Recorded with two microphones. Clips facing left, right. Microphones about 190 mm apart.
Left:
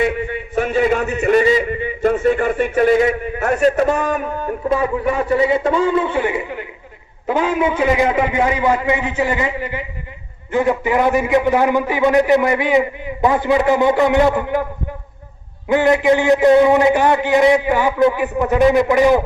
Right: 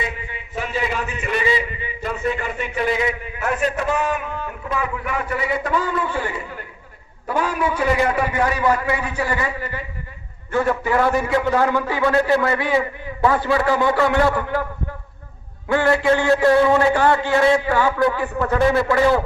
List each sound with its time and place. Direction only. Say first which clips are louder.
0.0 s a man's voice: left 11 dB; 60° left (ahead or behind); by 14.7 s 20° left (ahead or behind)
15.7 s a man's voice: left 4 dB; 20° left (ahead or behind)